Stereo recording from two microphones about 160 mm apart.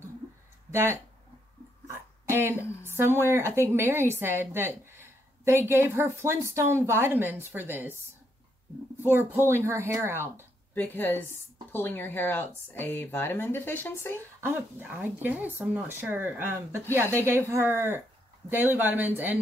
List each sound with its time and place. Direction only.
0.7 s speech: 15° right (ahead or behind)
1.9 s hiccup: 15° right (ahead or behind)
3.0 s a woman's voice: 15° right (ahead or behind)
9.1 s a woman's voice: 15° right (ahead or behind)
10.7 s speech: 10° left (ahead or behind)
14.4 s a woman's voice: 10° right (ahead or behind)